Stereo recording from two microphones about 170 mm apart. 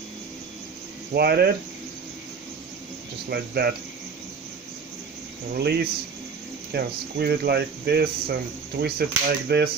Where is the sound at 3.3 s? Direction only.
70° right (ahead or behind).